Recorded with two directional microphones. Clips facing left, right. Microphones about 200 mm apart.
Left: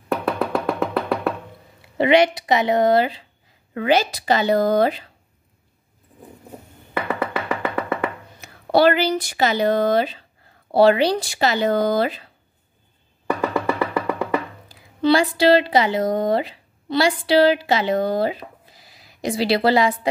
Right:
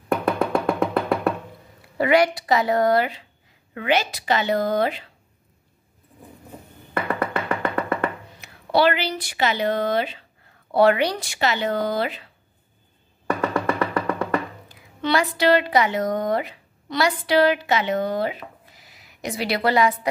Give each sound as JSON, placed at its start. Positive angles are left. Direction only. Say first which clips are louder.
{"t": 0.1, "sound": "music", "louder": "right 1 dB", "side_deg": 0}
{"t": 2.0, "sound": "a woman's voice", "louder": "left 2 dB", "side_deg": 20}
{"t": 6.9, "sound": "music", "louder": "even", "side_deg": 5}
{"t": 8.4, "sound": "speech", "louder": "left 3 dB", "side_deg": 40}
{"t": 13.4, "sound": "music", "louder": "left 1 dB", "side_deg": 0}
{"t": 14.7, "sound": "a sound", "louder": "left 6 dB", "side_deg": 30}
{"t": 15.3, "sound": "a woman's voice", "louder": "left 3 dB", "side_deg": 30}